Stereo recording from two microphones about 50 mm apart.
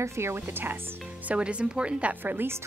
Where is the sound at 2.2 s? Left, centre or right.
Right.